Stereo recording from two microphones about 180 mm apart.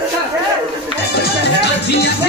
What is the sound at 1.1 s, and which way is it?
Speech, 65° left (ahead or behind).